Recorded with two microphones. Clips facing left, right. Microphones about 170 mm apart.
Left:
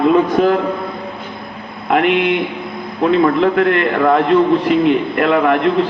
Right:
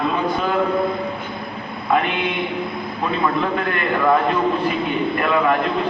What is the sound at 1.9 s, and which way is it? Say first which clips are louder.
A man's voice: left 7 dB; 75° left (ahead or behind).